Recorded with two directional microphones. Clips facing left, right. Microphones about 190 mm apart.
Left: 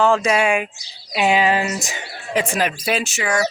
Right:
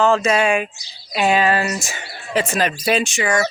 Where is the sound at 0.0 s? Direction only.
15° left (ahead or behind).